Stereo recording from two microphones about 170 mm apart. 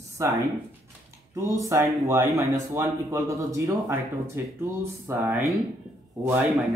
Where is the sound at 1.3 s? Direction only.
15° right (ahead or behind).